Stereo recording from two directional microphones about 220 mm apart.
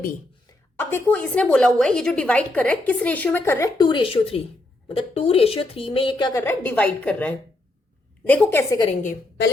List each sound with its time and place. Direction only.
0.4 s a woman's voice: 10° left (ahead or behind)